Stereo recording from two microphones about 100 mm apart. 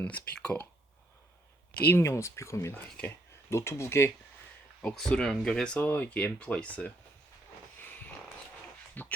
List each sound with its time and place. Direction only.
0.0 s speech: 10° left (ahead or behind)
1.9 s speech: 30° left (ahead or behind)
4.8 s speech: 10° left (ahead or behind)
9.0 s speech: 20° left (ahead or behind)